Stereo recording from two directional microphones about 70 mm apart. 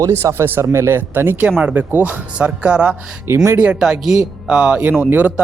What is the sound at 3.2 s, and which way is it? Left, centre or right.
Speech, right.